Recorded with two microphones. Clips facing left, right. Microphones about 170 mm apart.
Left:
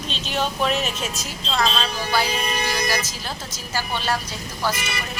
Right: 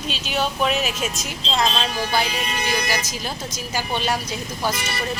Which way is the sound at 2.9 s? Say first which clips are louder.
Even; 15° right (ahead or behind).